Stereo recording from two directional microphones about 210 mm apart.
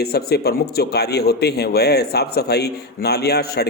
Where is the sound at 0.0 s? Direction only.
50° left (ahead or behind).